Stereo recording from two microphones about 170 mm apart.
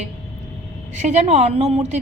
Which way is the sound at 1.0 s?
40° right (ahead or behind).